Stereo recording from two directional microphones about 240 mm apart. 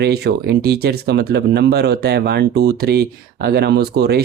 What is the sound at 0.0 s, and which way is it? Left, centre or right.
Speech, right.